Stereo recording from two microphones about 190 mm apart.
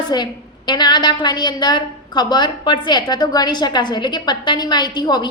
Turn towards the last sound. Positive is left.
turn(degrees=20)  # may be behind; listen again after turning